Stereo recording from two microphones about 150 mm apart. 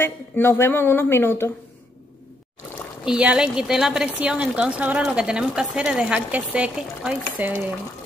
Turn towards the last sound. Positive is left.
turn(degrees=-10)  # may be behind; listen again after turning